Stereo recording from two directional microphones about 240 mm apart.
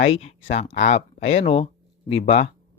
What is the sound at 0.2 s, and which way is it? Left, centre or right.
Speech, left.